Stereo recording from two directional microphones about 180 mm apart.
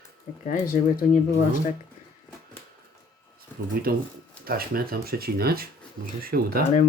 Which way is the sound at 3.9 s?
55° right (ahead or behind).